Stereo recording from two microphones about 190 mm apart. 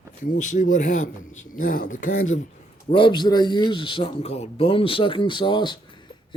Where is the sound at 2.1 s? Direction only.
90° left.